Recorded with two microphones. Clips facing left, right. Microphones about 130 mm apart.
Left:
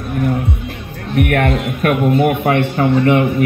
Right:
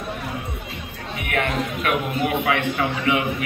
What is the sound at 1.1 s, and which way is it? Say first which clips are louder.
A man's voice: left 9 dB; 60° left (ahead or behind).